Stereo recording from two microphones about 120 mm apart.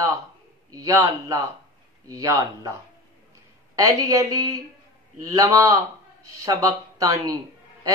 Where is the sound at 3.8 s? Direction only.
30° right (ahead or behind).